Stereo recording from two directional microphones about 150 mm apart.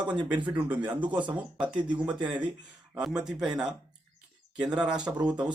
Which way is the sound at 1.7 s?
30° right (ahead or behind).